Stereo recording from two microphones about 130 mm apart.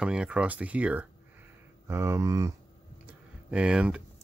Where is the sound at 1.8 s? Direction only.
20° right (ahead or behind).